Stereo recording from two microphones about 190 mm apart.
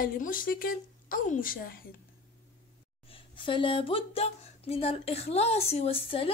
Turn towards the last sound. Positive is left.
turn(degrees=30)  # may be behind; listen again after turning